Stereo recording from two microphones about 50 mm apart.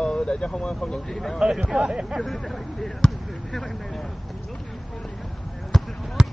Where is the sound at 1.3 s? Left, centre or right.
Centre.